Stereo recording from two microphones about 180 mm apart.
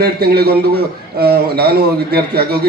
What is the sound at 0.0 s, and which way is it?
A man's voice, 60° right (ahead or behind).